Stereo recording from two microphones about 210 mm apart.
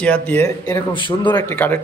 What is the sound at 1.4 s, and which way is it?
Speech, 10° left (ahead or behind).